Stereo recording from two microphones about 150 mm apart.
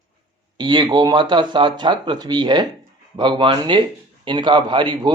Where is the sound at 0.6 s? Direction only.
30° right (ahead or behind).